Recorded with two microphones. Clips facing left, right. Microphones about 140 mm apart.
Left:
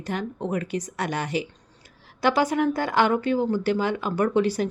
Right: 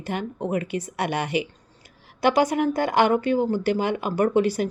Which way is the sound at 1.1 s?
60° right (ahead or behind).